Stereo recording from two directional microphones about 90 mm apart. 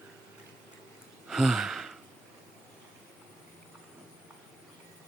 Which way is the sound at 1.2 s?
5° right (ahead or behind).